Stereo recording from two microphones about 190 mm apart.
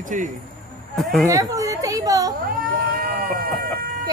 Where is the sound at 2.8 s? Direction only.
50° right (ahead or behind).